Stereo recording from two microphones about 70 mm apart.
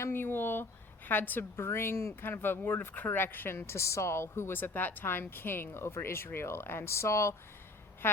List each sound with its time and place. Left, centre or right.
0.0 s a woman's voice: left
8.0 s a woman's voice: left